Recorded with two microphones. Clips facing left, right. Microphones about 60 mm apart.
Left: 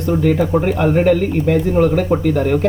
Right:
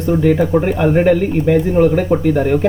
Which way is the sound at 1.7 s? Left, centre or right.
Centre.